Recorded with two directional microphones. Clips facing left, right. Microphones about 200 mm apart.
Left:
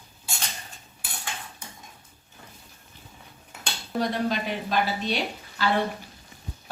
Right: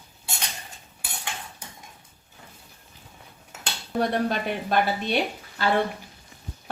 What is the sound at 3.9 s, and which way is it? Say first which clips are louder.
A woman's voice: right 2 dB; 60° right (ahead or behind).